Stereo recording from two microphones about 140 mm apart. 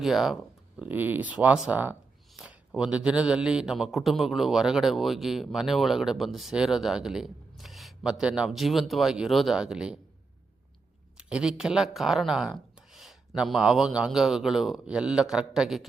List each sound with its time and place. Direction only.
0.0 s a man's voice: centre (ahead or behind)
0.8 s a man's voice: 15° right (ahead or behind)
11.2 s a man's voice: 5° right (ahead or behind)